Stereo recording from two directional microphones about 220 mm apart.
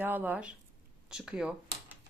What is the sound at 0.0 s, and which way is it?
Speech, 10° right (ahead or behind).